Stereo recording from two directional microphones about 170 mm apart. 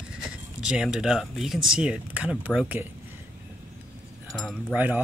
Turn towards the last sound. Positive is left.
turn(degrees=-10)  # may be behind; listen again after turning